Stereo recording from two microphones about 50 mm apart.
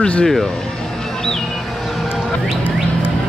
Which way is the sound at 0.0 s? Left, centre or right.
Centre.